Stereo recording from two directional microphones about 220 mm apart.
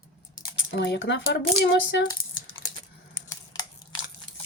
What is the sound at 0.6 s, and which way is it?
Speech, 50° left (ahead or behind).